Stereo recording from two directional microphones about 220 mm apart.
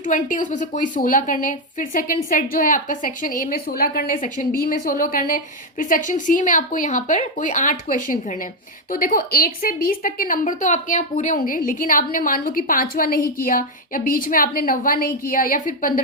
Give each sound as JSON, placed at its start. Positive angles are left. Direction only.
{"t": 0.0, "sound": "a woman's voice", "side_deg": 35}